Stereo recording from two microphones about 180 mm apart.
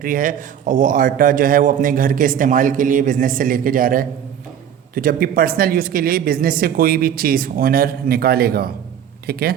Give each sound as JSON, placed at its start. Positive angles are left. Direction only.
{"t": 0.0, "sound": "a woman's voice", "side_deg": -50}